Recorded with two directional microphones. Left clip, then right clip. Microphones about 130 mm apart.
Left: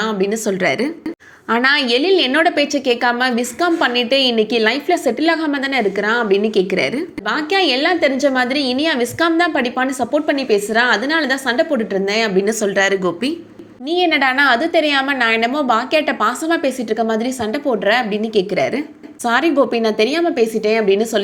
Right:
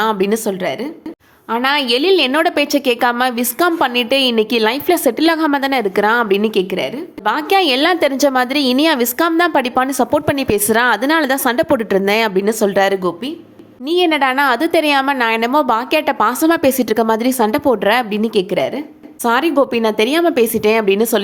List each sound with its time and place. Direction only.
0.0 s a woman's voice: 40° right (ahead or behind)
0.6 s a woman's voice: 10° left (ahead or behind)
1.7 s a woman's voice: 15° right (ahead or behind)
2.0 s a woman's voice: 30° right (ahead or behind)
7.3 s a woman's voice: 35° right (ahead or behind); by 12.3 s 55° right (ahead or behind)
12.4 s a woman's voice: 30° right (ahead or behind)
18.2 s a woman's voice: 25° right (ahead or behind)